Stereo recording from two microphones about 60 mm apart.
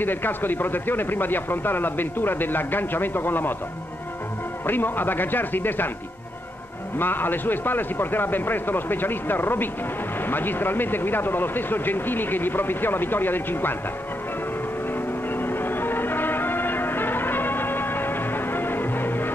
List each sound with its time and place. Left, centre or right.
0.0 s speech: left
4.6 s speech: left
7.0 s speech: left
15.0 s music: left